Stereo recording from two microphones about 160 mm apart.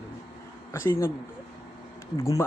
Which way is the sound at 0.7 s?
15° left (ahead or behind).